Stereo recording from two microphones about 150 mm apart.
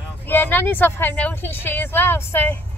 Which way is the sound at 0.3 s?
15° left (ahead or behind).